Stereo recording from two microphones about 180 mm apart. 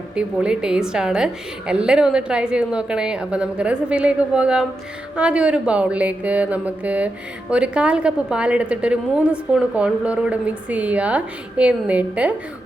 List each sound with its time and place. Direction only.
0.2 s a woman's voice: 5° right (ahead or behind)